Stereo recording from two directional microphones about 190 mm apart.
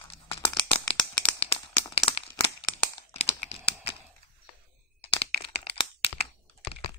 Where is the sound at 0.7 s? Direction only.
30° left (ahead or behind).